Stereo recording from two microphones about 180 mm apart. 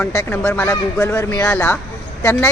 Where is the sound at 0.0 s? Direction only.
15° left (ahead or behind).